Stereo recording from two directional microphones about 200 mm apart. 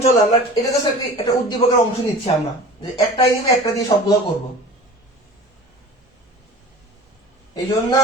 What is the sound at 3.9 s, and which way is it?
Speech, 20° left (ahead or behind).